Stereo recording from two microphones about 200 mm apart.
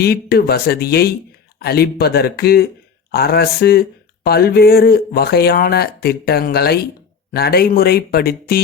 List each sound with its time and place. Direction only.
0.0 s speech: 50° left (ahead or behind)